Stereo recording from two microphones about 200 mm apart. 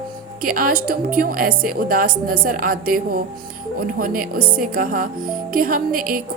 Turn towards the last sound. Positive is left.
turn(degrees=-45)  # may be behind; listen again after turning